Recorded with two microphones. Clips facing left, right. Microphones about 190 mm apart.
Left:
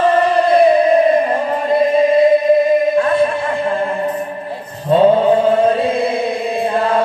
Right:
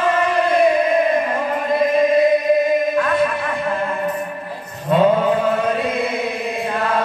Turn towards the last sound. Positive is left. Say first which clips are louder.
# left 5 dB
turn(degrees=30)  # may be behind; listen again after turning